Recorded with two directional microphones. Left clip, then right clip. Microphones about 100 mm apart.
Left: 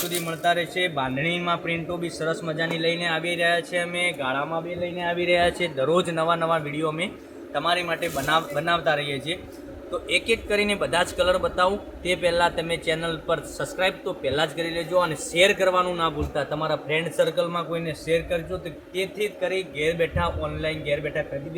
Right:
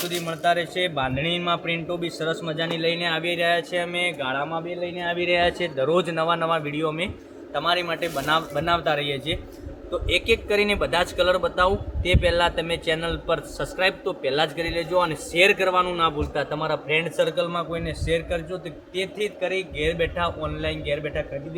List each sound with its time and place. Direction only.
0.3 s a man's voice: 20° right (ahead or behind)
1.4 s a man's voice: 50° right (ahead or behind)
3.9 s a man's voice: 25° right (ahead or behind)
4.5 s a man's voice: 10° right (ahead or behind)
5.1 s speech: 5° left (ahead or behind)
5.9 s a man's voice: 20° right (ahead or behind)
6.7 s a man's voice: 45° right (ahead or behind)
12.0 s a man's voice: 20° right (ahead or behind)